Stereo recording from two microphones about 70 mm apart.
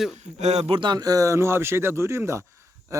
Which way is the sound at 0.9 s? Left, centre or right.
Right.